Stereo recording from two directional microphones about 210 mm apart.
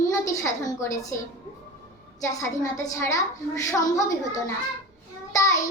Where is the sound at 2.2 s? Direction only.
15° left (ahead or behind).